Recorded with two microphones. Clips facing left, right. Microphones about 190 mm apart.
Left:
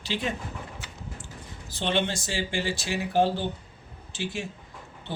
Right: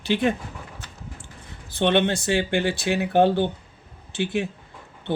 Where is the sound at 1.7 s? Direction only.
60° right (ahead or behind).